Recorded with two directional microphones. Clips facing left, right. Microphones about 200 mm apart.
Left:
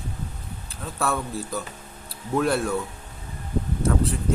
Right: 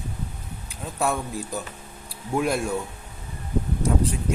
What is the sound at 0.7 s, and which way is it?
Speech, 15° right (ahead or behind).